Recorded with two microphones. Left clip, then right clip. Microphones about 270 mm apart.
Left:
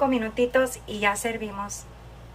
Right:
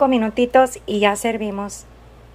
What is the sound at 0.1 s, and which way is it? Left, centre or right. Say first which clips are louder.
A woman's voice: right 7 dB; right.